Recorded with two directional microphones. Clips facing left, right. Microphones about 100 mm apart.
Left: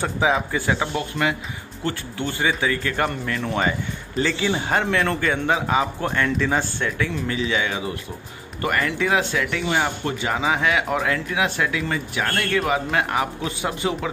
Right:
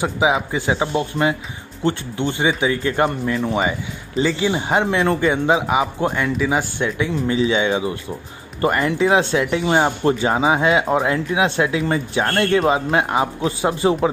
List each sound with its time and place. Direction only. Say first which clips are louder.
0.0 s a man's voice: right 3 dB; 15° right (ahead or behind); by 14.1 s 30° right (ahead or behind)